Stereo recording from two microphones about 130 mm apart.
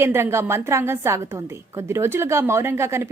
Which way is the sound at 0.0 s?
20° right (ahead or behind).